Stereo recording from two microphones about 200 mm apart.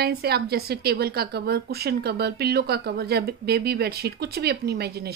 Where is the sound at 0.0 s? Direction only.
50° right (ahead or behind).